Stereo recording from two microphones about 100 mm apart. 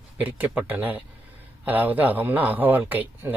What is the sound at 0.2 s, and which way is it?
A man's voice, 15° right (ahead or behind).